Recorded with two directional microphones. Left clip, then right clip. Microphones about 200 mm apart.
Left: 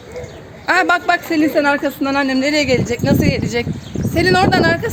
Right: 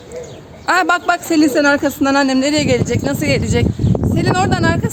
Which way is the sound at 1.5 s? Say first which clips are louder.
Right 2 dB; 35° right (ahead or behind).